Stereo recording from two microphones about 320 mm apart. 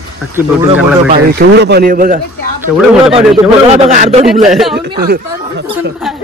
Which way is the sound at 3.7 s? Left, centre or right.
Right.